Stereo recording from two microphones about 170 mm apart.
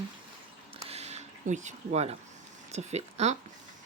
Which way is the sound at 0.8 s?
40° right (ahead or behind).